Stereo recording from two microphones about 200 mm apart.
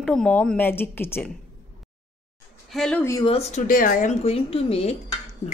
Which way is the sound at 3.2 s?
30° left (ahead or behind).